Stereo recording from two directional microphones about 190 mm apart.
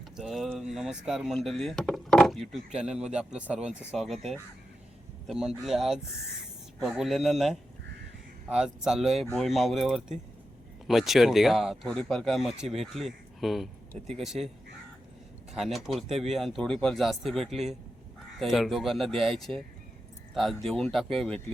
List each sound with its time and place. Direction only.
0.2 s speech: centre (ahead or behind)
15.5 s speech: centre (ahead or behind)
19.1 s speech: 30° right (ahead or behind)
19.4 s speech: centre (ahead or behind)